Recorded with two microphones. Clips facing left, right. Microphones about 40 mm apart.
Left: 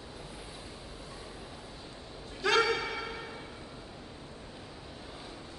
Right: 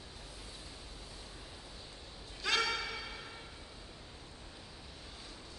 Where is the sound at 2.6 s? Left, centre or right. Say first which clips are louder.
Left 6 dB; left.